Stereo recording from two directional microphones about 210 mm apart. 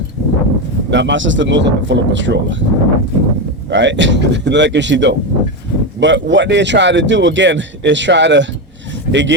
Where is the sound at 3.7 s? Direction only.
60° right (ahead or behind).